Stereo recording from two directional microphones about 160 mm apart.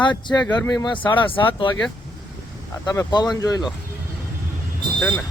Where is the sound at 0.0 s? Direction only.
30° left (ahead or behind).